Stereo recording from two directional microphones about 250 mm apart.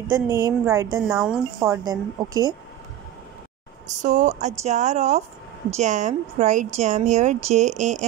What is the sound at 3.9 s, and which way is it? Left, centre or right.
A woman's voice, right.